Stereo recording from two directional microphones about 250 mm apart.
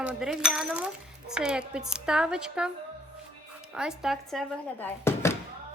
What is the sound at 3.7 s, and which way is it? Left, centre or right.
A woman's voice, centre.